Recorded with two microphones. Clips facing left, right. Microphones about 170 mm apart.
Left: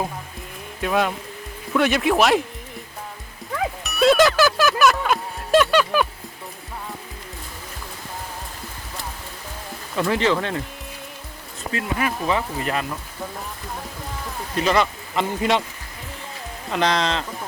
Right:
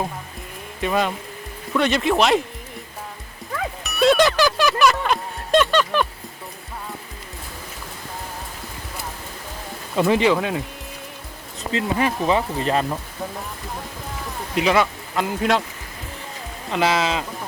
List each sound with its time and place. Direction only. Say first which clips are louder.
0.8 s speech: even; centre (ahead or behind)
3.8 s music: even; centre (ahead or behind)
9.9 s speech: right 3 dB; 20° right (ahead or behind)
11.7 s speech: right 3 dB; 25° right (ahead or behind)
14.5 s speech: right 1 dB; 10° right (ahead or behind)
16.6 s speech: right 1 dB; 5° right (ahead or behind)